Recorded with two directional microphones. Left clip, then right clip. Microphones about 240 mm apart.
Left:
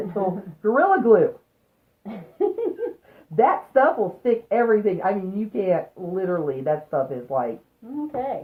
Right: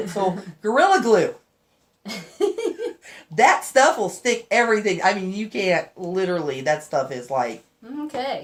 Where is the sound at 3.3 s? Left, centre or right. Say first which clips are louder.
Right 2 dB; centre.